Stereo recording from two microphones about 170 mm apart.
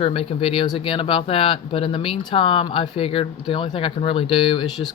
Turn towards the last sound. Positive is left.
turn(degrees=30)  # may be behind; listen again after turning